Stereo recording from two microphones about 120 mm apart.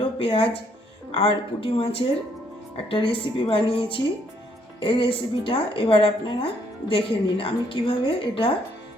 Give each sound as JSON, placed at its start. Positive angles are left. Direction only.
{"t": 0.0, "sound": "a woman's voice", "side_deg": 50}